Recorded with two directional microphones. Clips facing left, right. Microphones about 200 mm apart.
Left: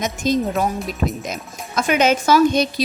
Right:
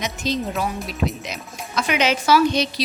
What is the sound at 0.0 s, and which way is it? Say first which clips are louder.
Speech: left 5 dB; 45° left (ahead or behind).